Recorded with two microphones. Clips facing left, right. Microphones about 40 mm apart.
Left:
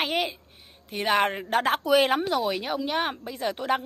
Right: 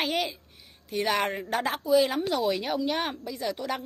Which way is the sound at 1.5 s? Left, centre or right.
Left.